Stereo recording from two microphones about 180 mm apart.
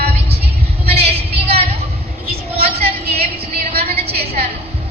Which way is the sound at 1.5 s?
35° right (ahead or behind).